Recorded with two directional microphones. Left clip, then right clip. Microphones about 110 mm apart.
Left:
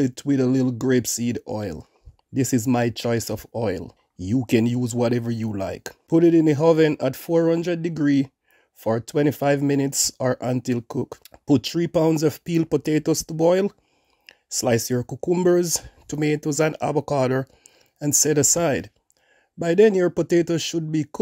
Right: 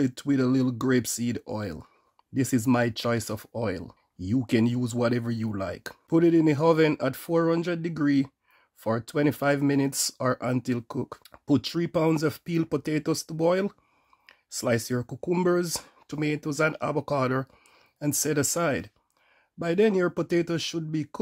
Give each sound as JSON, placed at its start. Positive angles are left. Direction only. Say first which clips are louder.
{"t": 0.0, "sound": "speech", "louder": "left 4 dB", "side_deg": 20}